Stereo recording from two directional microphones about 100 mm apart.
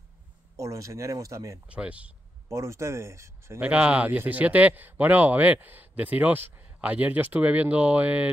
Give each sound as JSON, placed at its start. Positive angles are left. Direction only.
{"t": 0.6, "sound": "speech", "side_deg": -30}
{"t": 1.7, "sound": "speech", "side_deg": -10}
{"t": 2.4, "sound": "speech", "side_deg": -30}
{"t": 3.6, "sound": "speech", "side_deg": -15}